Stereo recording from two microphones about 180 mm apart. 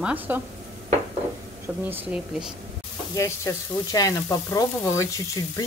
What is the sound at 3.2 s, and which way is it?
Frying, 20° left (ahead or behind).